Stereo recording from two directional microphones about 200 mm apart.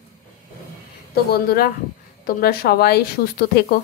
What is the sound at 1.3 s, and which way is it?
A woman's voice, 50° left (ahead or behind).